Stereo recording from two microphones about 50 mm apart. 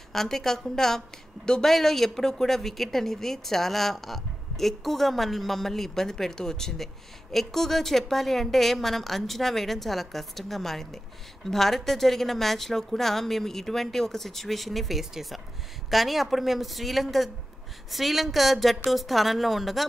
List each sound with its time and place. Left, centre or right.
0.1 s a woman's voice: centre